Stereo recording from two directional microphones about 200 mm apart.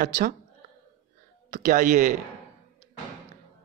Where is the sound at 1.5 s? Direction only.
40° right (ahead or behind).